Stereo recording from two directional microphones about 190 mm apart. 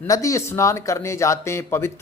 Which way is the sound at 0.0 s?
15° left (ahead or behind).